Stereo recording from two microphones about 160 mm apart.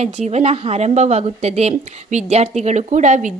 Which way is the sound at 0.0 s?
45° right (ahead or behind).